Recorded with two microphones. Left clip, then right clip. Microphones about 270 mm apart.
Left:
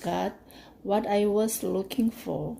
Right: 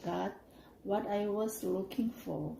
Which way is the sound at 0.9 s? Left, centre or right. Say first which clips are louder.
Left 9 dB; left.